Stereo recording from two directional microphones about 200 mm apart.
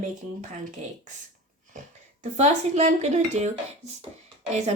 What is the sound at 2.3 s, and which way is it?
A woman's voice, 35° right (ahead or behind).